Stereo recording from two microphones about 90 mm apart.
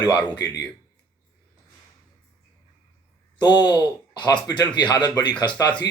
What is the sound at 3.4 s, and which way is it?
Speech, 50° left (ahead or behind).